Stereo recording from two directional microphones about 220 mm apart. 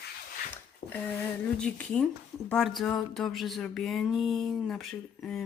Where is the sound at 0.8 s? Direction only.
45° left (ahead or behind).